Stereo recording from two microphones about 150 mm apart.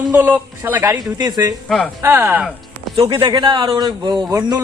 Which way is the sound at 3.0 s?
30° right (ahead or behind).